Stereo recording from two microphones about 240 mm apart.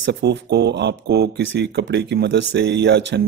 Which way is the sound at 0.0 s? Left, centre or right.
Right.